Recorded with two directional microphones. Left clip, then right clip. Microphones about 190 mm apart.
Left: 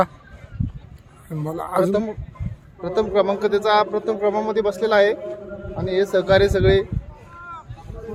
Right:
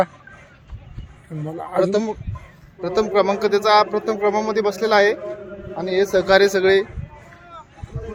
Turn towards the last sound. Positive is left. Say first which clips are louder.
# right 2 dB
turn(degrees=-20)  # may be behind; listen again after turning